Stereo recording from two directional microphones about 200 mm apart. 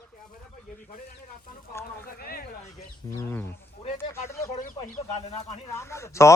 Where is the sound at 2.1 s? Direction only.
50° left (ahead or behind).